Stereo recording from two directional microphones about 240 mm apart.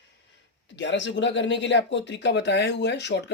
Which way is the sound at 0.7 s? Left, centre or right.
Left.